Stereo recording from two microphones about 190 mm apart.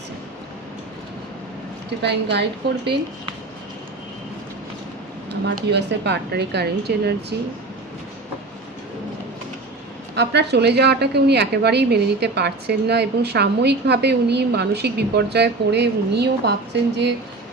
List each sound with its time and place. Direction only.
2.0 s a woman's voice: 60° right (ahead or behind)
5.3 s a woman's voice: 60° right (ahead or behind)
10.2 s a woman's voice: 60° right (ahead or behind)